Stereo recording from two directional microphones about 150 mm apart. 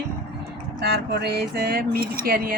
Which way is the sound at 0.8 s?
90° right.